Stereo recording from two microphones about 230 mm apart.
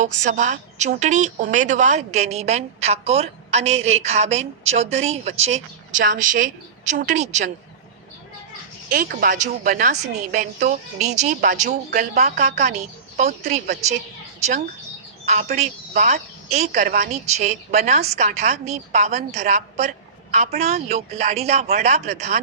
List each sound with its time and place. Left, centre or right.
0.0 s a woman's voice: right
8.9 s a woman's voice: right
15.3 s speech: right